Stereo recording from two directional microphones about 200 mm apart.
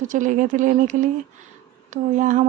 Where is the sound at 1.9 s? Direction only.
40° right (ahead or behind).